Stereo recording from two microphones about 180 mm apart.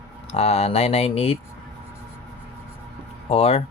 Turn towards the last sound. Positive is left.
turn(degrees=35)  # may be behind; listen again after turning